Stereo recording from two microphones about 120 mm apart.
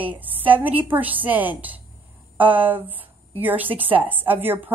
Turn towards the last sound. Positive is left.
turn(degrees=-15)  # may be behind; listen again after turning